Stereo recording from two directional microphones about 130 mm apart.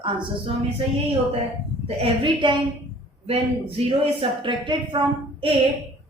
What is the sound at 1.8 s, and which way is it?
Speech, 45° right (ahead or behind).